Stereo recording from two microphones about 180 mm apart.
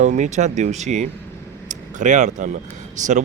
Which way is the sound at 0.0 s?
40° right (ahead or behind).